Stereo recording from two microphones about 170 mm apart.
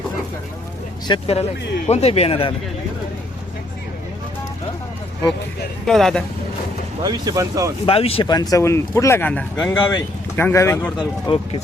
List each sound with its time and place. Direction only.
1.0 s speech: 30° left (ahead or behind)
5.8 s speech: centre (ahead or behind)
7.0 s speech: 25° right (ahead or behind)
7.9 s speech: 35° left (ahead or behind); by 10.9 s 15° left (ahead or behind)
11.3 s speech: 30° left (ahead or behind)